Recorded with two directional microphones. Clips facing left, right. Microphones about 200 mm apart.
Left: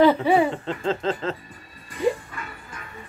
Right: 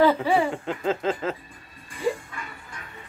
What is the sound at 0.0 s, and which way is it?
Speech, 20° left (ahead or behind).